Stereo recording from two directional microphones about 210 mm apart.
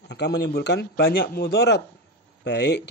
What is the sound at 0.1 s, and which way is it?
Speech, 55° left (ahead or behind).